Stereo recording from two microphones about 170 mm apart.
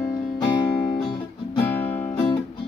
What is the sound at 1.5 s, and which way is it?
Music, 10° left (ahead or behind).